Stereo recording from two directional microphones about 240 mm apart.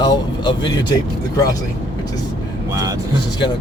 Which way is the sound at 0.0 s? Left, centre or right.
Centre.